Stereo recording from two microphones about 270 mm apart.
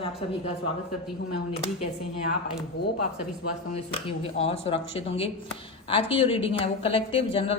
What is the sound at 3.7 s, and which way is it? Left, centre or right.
A woman's voice, left.